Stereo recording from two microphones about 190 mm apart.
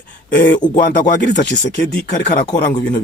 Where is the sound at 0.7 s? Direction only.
45° left (ahead or behind).